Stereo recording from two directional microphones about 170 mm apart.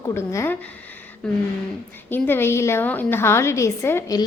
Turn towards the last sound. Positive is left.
turn(degrees=20)  # may be behind; listen again after turning